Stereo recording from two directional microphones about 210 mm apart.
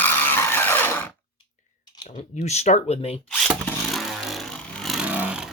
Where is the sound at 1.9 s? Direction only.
25° left (ahead or behind).